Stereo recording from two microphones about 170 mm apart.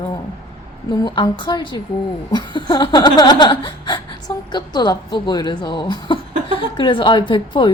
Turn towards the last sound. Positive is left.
turn(degrees=30)  # may be behind; listen again after turning